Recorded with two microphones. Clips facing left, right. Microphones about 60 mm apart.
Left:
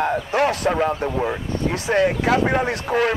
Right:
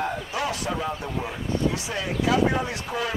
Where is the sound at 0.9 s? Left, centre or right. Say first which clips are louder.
Left 8 dB; left.